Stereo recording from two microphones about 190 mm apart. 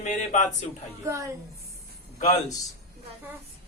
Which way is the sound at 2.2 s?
35° left (ahead or behind).